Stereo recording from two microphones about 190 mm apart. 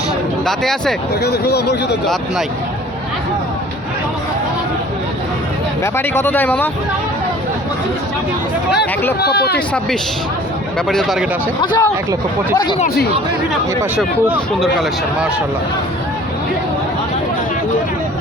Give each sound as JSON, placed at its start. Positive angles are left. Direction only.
{"t": 0.4, "sound": "speech", "side_deg": 0}
{"t": 1.2, "sound": "speech", "side_deg": 60}
{"t": 5.8, "sound": "speech", "side_deg": 10}
{"t": 8.7, "sound": "speech", "side_deg": 60}
{"t": 9.6, "sound": "speech", "side_deg": 5}
{"t": 11.6, "sound": "speech", "side_deg": 20}
{"t": 13.9, "sound": "speech", "side_deg": -10}